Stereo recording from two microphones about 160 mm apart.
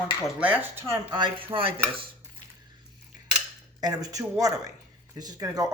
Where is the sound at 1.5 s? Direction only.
35° right (ahead or behind).